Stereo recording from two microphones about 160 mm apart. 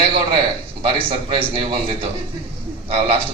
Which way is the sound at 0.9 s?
35° right (ahead or behind).